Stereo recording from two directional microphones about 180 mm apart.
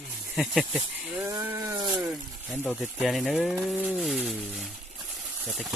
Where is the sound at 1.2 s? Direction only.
20° right (ahead or behind).